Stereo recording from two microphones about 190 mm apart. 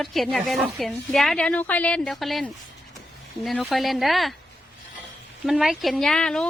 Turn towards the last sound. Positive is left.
turn(degrees=5)  # may be behind; listen again after turning